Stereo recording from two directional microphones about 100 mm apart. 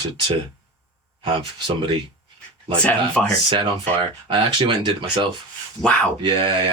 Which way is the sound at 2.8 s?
10° left (ahead or behind).